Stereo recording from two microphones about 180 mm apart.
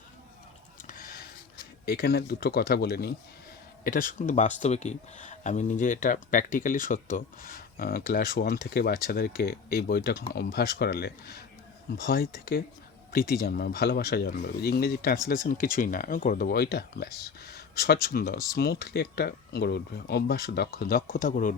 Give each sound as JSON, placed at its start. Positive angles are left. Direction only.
{"t": 0.9, "sound": "a sound", "side_deg": 55}
{"t": 1.8, "sound": "speech", "side_deg": 55}
{"t": 3.8, "sound": "speech", "side_deg": 50}